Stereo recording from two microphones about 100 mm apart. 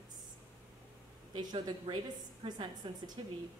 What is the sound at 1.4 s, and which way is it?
Speech, 45° right (ahead or behind).